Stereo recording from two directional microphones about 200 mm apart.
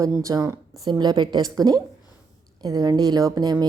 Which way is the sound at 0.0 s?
15° right (ahead or behind).